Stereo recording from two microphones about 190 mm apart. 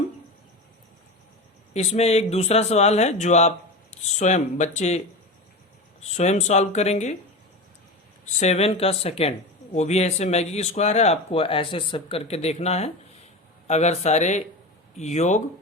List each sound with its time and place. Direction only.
1.7 s speech: 35° left (ahead or behind)
8.2 s speech: 35° left (ahead or behind)